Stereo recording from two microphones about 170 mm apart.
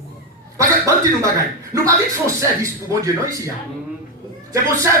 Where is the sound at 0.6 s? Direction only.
20° right (ahead or behind).